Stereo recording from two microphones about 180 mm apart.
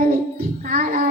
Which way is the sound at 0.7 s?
50° right (ahead or behind).